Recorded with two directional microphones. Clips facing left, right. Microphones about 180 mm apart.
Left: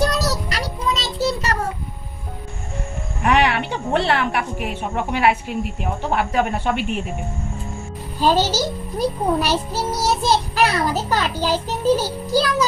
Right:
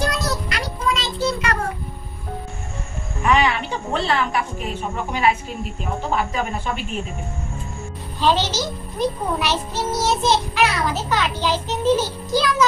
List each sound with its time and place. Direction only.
0.0 s child singing: 40° left (ahead or behind)
3.3 s a woman's voice: 60° left (ahead or behind)
8.2 s a child's voice: 40° left (ahead or behind)
10.0 s child singing: 40° left (ahead or behind)